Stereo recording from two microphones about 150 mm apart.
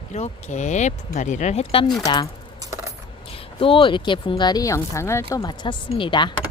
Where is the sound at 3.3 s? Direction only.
35° left (ahead or behind).